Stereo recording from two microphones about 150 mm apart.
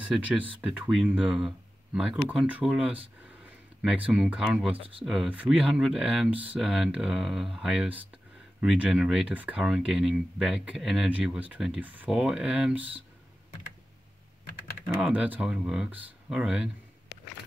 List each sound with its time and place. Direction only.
0.0 s speech: 10° right (ahead or behind)
4.1 s speech: 5° right (ahead or behind)
4.7 s speech: 40° right (ahead or behind)
5.0 s speech: centre (ahead or behind)
15.0 s speech: 10° right (ahead or behind)